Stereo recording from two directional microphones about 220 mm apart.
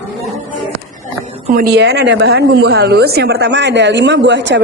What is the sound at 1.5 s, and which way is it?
Speech, 45° right (ahead or behind).